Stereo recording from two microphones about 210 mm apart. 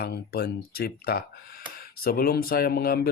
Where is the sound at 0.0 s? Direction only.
45° left (ahead or behind).